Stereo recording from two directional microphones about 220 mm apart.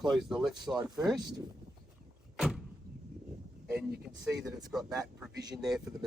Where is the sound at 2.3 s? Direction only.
Centre (ahead or behind).